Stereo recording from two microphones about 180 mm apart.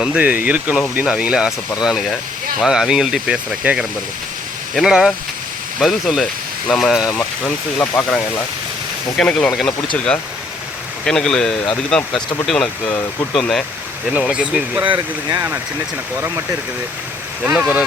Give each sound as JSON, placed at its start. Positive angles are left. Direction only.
{"t": 0.0, "sound": "speech", "side_deg": -5}
{"t": 11.0, "sound": "speech", "side_deg": 5}